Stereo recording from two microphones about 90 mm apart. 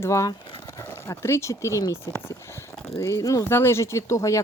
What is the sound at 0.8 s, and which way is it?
Speech, 30° left (ahead or behind).